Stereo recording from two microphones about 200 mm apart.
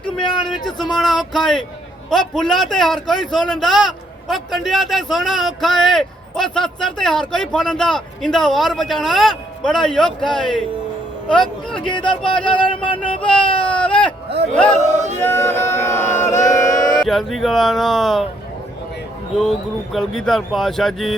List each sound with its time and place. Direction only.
0.2 s a sound: 25° left (ahead or behind)
0.9 s a man's voice: centre (ahead or behind)
11.9 s a sound: 25° left (ahead or behind)
13.6 s speech: 5° left (ahead or behind)
14.8 s speech: 35° right (ahead or behind)
15.2 s chant: 10° left (ahead or behind)
16.9 s a man's voice: centre (ahead or behind)
19.4 s a man's voice: centre (ahead or behind)